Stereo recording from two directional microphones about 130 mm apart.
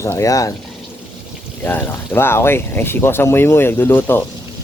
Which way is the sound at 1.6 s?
15° left (ahead or behind).